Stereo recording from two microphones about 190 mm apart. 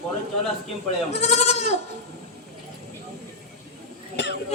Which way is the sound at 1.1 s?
35° left (ahead or behind).